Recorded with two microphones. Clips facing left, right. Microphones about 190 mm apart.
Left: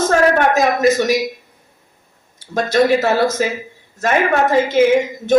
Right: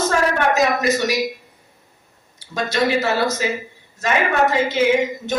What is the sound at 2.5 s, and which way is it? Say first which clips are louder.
Speech: left 5 dB; 50° left (ahead or behind).